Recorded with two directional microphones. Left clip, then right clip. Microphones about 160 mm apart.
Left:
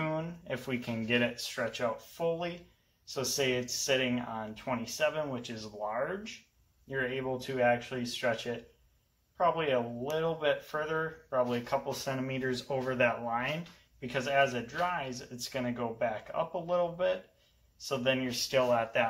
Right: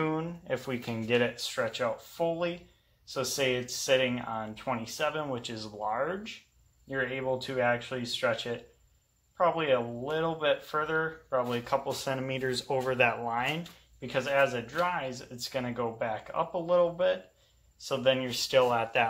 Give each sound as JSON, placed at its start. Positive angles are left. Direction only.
{"t": 0.0, "sound": "speech", "side_deg": -20}